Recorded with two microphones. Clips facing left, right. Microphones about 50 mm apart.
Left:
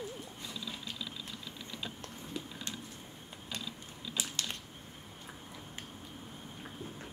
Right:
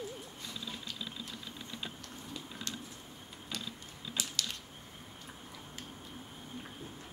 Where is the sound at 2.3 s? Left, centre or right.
Left.